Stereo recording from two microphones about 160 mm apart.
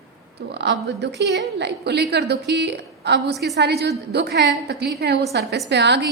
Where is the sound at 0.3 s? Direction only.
90° right.